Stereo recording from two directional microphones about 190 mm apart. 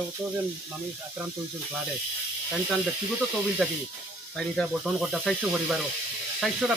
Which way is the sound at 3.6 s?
Centre (ahead or behind).